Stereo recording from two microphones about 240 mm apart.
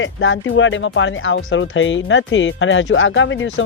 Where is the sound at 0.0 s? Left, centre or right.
Left.